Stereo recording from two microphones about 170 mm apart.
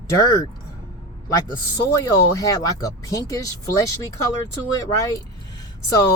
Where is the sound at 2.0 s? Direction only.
20° left (ahead or behind).